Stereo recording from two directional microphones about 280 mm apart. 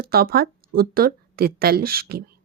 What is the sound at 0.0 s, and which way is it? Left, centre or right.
A woman's voice, right.